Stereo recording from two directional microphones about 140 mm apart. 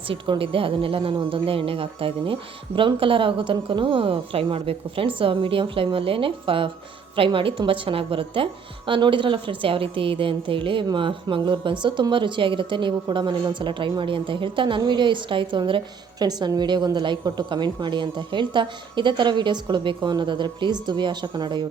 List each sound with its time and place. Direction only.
0.1 s a woman's voice: 40° right (ahead or behind)